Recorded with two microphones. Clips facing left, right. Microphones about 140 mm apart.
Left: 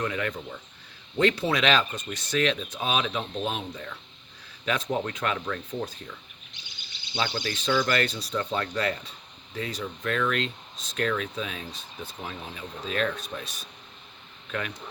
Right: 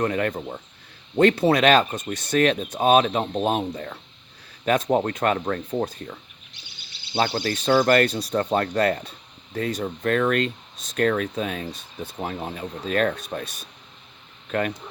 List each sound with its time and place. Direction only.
0.0 s speech: 50° right (ahead or behind)
2.1 s speech: 55° right (ahead or behind)
8.3 s speech: 45° right (ahead or behind)